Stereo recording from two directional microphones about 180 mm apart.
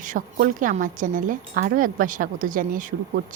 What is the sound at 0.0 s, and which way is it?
A woman's voice, 50° right (ahead or behind).